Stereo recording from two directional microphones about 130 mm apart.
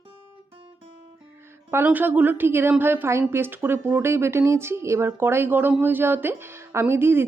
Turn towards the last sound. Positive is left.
turn(degrees=-15)  # may be behind; listen again after turning